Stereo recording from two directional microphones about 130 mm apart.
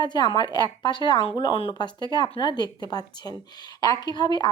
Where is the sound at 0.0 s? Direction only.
35° left (ahead or behind).